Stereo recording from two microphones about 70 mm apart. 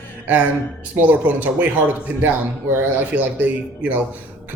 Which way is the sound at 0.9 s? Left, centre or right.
Right.